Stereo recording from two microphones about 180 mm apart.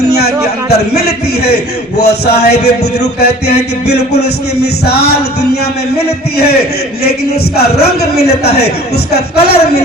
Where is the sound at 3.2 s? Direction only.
65° left (ahead or behind).